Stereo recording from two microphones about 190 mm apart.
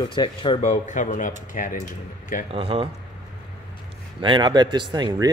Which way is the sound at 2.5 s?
30° right (ahead or behind).